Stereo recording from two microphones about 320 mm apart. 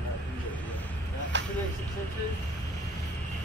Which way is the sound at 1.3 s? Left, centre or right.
Right.